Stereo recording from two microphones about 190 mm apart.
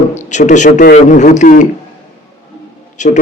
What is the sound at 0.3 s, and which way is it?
Speech, 40° left (ahead or behind).